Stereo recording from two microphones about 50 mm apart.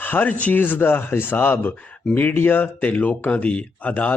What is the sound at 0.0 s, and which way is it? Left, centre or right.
Speech, left.